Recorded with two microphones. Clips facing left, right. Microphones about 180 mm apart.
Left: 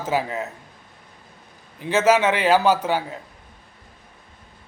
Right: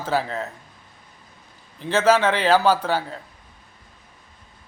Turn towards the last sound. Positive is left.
turn(degrees=15)  # may be behind; listen again after turning